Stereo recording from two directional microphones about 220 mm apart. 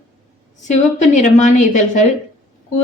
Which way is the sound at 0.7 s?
35° left (ahead or behind).